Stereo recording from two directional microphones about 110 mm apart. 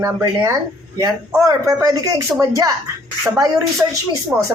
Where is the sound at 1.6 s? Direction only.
30° right (ahead or behind).